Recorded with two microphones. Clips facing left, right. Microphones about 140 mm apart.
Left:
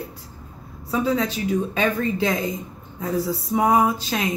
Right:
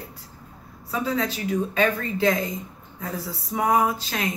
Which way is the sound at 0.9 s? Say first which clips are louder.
Left 4 dB; 20° left (ahead or behind).